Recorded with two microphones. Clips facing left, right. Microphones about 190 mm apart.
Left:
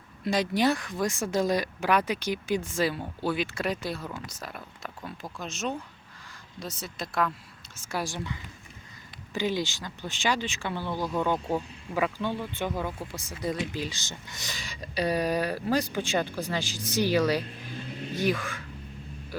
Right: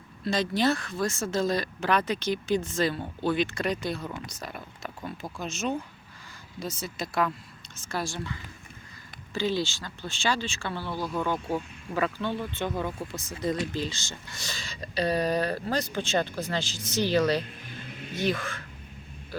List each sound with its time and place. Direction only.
0.3 s speech: 15° left (ahead or behind)
7.8 s speech: 10° left (ahead or behind)
19.3 s vehicle: 10° left (ahead or behind)